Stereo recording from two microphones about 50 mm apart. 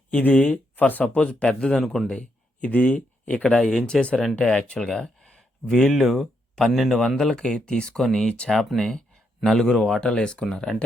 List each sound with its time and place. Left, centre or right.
0.1 s speech: left
1.0 s speech: centre
1.8 s a man's voice: centre
2.0 s a sound: centre
2.6 s speech: left
3.4 s a man's voice: centre
7.2 s speech: centre
8.7 s a man's voice: centre